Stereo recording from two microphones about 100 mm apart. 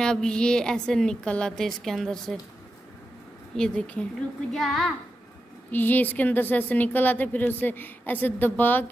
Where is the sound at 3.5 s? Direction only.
10° left (ahead or behind).